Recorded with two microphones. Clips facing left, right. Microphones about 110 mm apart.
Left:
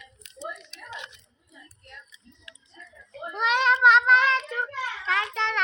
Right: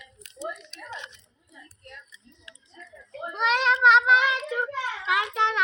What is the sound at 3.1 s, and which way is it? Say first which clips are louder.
Child singing: even; centre (ahead or behind).